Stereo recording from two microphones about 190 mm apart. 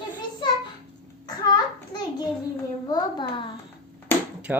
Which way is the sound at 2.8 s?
20° left (ahead or behind).